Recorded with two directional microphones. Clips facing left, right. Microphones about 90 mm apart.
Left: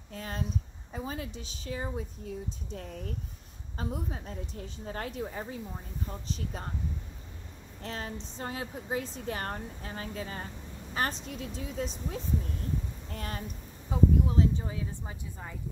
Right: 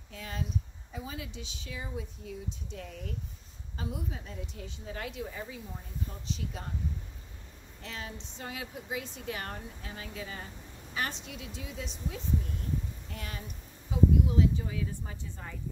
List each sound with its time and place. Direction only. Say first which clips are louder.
0.1 s a sound: left 2 dB; 45° left (ahead or behind)
0.9 s speech: left 4 dB; 40° left (ahead or behind)
7.8 s speech: left 4 dB; 40° left (ahead or behind)
13.1 s speech: left 6 dB; 40° left (ahead or behind)
14.9 s speech: even; 15° left (ahead or behind)